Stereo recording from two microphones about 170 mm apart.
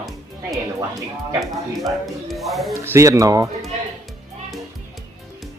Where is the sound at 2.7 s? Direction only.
15° right (ahead or behind).